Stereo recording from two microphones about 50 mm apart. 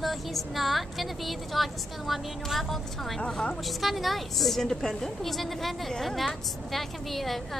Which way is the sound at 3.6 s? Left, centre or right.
Centre.